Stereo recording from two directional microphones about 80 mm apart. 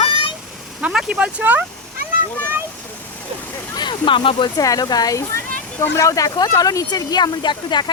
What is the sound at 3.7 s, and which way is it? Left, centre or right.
Speech, left.